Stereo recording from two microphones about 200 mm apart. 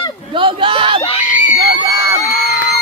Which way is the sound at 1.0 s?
35° left (ahead or behind).